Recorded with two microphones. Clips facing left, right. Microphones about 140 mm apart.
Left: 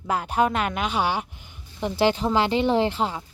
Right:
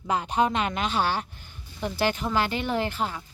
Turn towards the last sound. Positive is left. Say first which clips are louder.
# left 5 dB
turn(degrees=25)  # may be behind; listen again after turning